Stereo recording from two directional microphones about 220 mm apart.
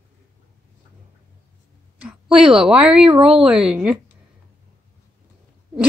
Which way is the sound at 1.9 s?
5° right (ahead or behind).